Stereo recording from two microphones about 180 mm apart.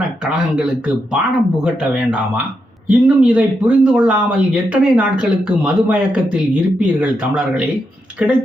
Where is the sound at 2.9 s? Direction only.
5° right (ahead or behind).